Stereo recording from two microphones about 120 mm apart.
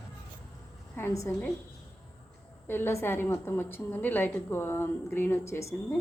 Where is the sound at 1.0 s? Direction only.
25° left (ahead or behind).